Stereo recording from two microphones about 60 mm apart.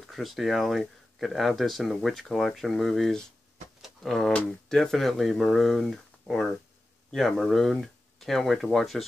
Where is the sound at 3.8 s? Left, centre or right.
Centre.